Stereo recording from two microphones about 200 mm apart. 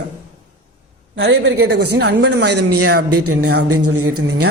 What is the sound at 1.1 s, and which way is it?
A woman's voice, 60° right (ahead or behind).